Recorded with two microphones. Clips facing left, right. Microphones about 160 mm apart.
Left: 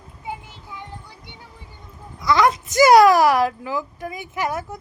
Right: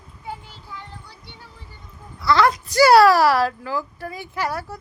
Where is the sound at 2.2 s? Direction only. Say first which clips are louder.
Even; 20° left (ahead or behind).